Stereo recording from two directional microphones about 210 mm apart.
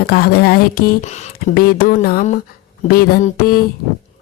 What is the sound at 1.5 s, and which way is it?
Speech, 45° left (ahead or behind).